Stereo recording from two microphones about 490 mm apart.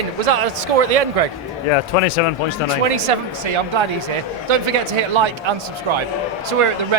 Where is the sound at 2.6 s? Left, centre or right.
Right.